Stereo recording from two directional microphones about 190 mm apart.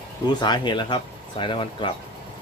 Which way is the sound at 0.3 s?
20° left (ahead or behind).